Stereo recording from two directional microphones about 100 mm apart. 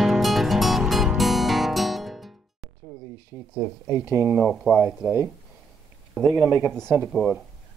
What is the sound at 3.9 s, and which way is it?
Speech, 25° right (ahead or behind).